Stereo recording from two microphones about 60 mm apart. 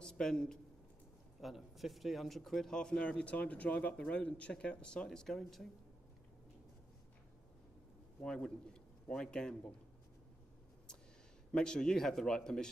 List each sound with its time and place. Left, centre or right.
0.0 s speech: centre
1.4 s speech: centre
2.7 s a man's voice: centre
8.2 s a man's voice: centre
11.5 s a man's voice: centre